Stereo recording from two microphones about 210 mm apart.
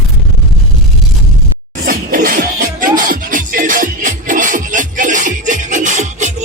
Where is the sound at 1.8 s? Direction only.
45° right (ahead or behind).